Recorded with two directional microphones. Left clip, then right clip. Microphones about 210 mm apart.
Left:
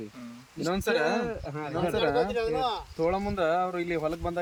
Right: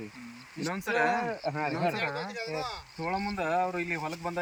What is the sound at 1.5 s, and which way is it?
Speech, 15° right (ahead or behind).